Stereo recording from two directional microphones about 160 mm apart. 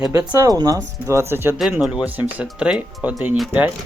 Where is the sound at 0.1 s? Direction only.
15° right (ahead or behind).